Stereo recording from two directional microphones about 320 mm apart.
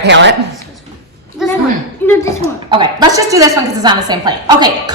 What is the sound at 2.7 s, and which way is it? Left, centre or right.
A woman's voice, centre.